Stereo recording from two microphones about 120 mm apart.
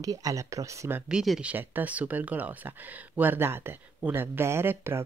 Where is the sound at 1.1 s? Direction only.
5° right (ahead or behind).